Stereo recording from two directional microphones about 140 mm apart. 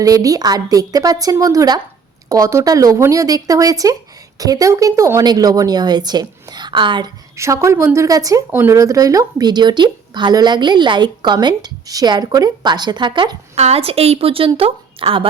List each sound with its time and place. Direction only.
0.0 s speech: 25° right (ahead or behind)
7.3 s speech: 20° right (ahead or behind)
13.6 s a woman's voice: 45° right (ahead or behind)